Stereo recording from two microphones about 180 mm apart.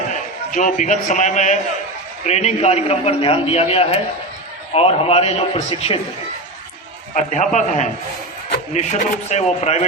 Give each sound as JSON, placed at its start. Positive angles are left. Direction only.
{"t": 0.1, "sound": "a man's voice", "side_deg": 45}
{"t": 7.1, "sound": "a man's voice", "side_deg": 45}